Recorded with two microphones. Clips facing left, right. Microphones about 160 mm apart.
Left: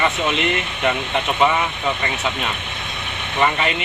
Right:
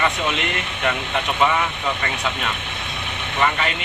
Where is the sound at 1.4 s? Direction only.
5° left (ahead or behind).